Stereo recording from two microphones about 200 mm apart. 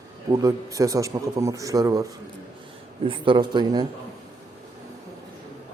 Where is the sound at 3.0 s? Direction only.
25° right (ahead or behind).